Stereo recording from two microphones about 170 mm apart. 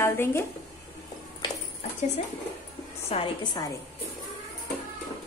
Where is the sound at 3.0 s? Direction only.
35° left (ahead or behind).